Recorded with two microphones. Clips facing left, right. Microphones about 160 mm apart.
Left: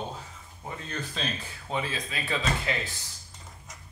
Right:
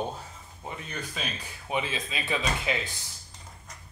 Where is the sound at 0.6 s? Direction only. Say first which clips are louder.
Left 1 dB; 15° right (ahead or behind).